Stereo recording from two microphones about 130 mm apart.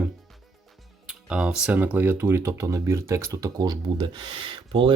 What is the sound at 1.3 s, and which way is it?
Speech, 5° right (ahead or behind).